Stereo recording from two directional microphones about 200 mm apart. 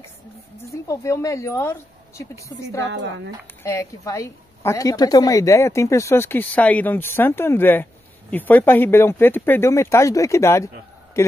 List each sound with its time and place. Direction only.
0.8 s a woman's voice: 15° left (ahead or behind)